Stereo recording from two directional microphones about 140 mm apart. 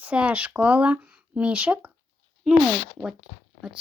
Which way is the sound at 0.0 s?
10° right (ahead or behind).